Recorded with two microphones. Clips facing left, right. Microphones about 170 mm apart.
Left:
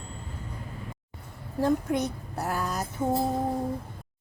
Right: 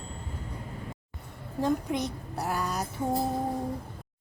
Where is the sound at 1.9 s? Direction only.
Centre (ahead or behind).